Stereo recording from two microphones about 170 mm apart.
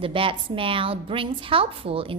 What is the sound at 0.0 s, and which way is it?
A woman's voice, 30° right (ahead or behind).